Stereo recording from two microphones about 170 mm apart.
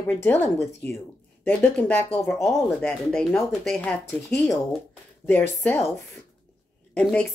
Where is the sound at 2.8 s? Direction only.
5° left (ahead or behind).